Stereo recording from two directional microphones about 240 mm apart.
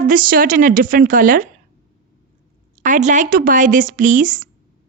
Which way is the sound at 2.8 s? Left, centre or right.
Right.